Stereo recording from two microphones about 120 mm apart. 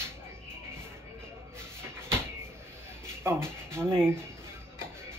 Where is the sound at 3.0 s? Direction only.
20° right (ahead or behind).